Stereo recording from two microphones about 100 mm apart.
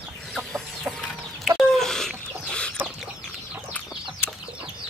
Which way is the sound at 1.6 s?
5° left (ahead or behind).